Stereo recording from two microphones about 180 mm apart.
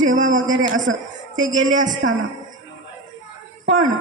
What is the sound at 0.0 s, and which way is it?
A man's voice, 45° right (ahead or behind).